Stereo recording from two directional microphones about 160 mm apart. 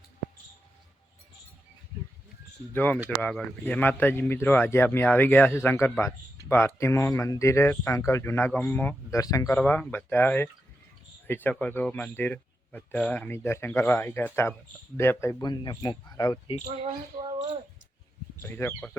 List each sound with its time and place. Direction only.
2.7 s speech: 10° left (ahead or behind)
9.1 s speech: 20° left (ahead or behind)
16.8 s speech: 30° right (ahead or behind)
18.4 s speech: 10° left (ahead or behind)